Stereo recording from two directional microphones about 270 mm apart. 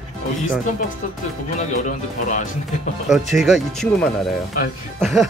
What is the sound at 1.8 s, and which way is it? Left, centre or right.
Speech, left.